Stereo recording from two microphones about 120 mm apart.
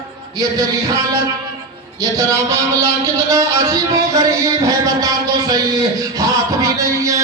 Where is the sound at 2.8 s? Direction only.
25° right (ahead or behind).